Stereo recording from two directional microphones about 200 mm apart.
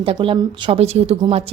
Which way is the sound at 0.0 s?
25° right (ahead or behind).